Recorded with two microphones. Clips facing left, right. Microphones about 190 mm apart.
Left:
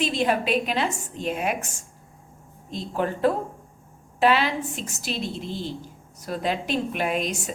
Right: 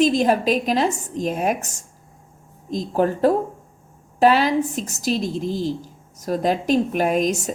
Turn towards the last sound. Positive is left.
turn(degrees=-40)  # may be behind; listen again after turning